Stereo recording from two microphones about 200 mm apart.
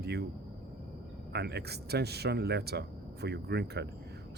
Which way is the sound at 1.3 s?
55° right (ahead or behind).